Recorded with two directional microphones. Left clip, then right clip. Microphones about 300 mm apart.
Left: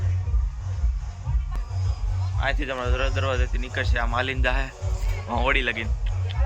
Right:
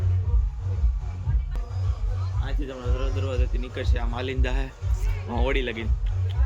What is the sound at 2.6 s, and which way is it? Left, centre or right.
Speech, left.